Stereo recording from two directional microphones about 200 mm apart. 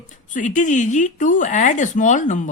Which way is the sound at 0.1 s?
40° left (ahead or behind).